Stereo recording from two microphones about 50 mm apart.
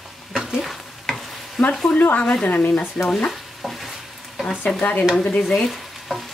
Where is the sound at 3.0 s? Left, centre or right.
Centre.